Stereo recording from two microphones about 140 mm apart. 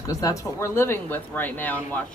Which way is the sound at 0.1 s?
25° left (ahead or behind).